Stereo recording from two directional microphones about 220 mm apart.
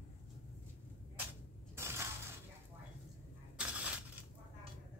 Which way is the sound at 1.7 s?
10° right (ahead or behind).